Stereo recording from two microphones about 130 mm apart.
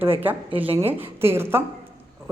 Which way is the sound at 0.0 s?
15° right (ahead or behind).